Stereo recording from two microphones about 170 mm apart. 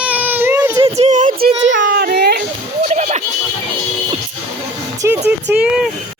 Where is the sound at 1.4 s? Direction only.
65° right (ahead or behind).